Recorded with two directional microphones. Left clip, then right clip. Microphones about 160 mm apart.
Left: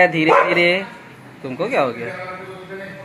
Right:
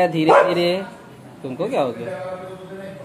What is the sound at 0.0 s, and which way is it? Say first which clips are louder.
Speech: left 1 dB; 15° right (ahead or behind).